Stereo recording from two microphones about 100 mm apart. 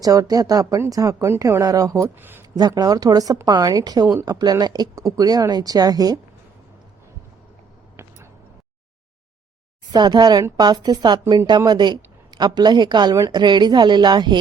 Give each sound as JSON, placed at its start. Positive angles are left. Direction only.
{"t": 0.0, "sound": "speech", "side_deg": -40}
{"t": 2.1, "sound": "speech", "side_deg": -20}
{"t": 2.6, "sound": "speech", "side_deg": -40}
{"t": 9.9, "sound": "a woman's voice", "side_deg": -50}